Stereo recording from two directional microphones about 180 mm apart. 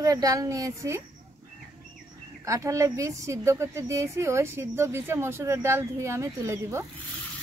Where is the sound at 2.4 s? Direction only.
15° right (ahead or behind).